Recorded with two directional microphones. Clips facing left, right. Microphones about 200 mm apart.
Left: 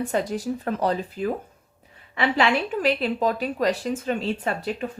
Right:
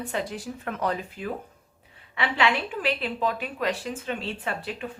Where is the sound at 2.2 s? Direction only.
40° left (ahead or behind).